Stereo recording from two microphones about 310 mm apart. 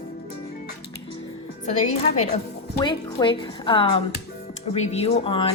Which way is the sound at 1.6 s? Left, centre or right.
Left.